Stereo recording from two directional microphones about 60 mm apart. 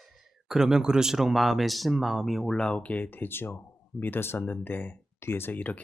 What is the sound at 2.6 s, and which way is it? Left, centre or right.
Speech, centre.